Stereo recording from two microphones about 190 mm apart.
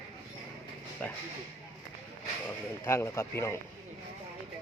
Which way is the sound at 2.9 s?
15° left (ahead or behind).